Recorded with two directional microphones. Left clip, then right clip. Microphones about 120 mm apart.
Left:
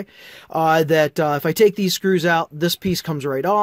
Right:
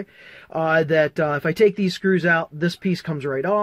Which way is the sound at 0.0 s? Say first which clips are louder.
Left 1 dB; 55° left (ahead or behind).